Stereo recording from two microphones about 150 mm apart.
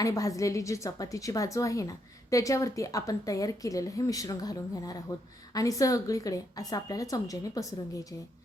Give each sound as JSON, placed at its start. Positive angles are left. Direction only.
{"t": 0.0, "sound": "a woman's voice", "side_deg": 20}